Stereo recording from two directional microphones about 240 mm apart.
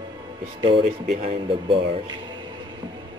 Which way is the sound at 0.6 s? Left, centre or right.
Right.